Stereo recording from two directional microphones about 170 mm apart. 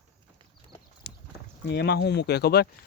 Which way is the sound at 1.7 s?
80° left.